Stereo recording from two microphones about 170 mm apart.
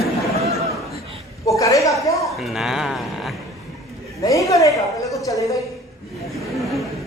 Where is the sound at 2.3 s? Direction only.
Centre (ahead or behind).